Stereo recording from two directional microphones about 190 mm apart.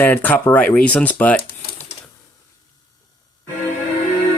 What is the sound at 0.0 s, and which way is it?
Speech, 10° left (ahead or behind).